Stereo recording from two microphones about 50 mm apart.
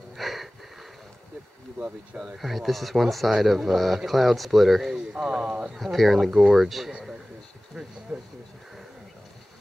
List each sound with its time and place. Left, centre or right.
0.1 s wheeze: centre
1.8 s speech: right
2.3 s speech: centre
4.9 s speech: centre
5.8 s speech: centre
6.9 s a man's voice: centre
8.1 s speech: centre